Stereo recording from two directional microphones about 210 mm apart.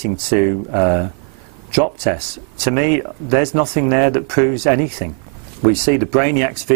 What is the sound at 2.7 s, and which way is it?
Speech, 5° right (ahead or behind).